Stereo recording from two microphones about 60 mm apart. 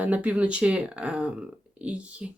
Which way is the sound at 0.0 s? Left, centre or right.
Right.